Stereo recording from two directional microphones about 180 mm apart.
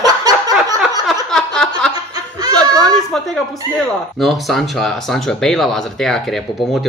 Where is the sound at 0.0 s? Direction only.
20° right (ahead or behind).